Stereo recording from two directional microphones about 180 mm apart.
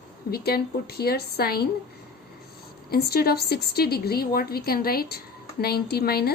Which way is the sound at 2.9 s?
60° left (ahead or behind).